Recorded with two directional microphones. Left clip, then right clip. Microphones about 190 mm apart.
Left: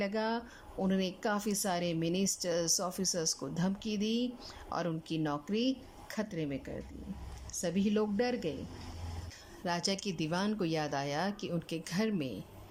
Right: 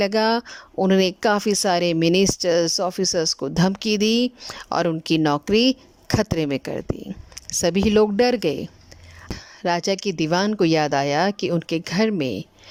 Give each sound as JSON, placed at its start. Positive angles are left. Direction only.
{"t": 0.0, "sound": "speech", "side_deg": -55}